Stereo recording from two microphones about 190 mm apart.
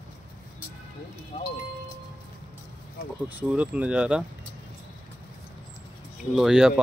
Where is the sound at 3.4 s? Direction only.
5° right (ahead or behind).